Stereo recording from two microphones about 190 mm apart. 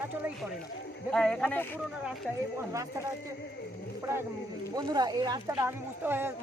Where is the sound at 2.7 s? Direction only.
15° right (ahead or behind).